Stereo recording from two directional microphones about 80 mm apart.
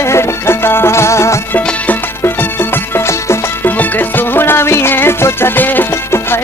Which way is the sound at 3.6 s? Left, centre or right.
Left.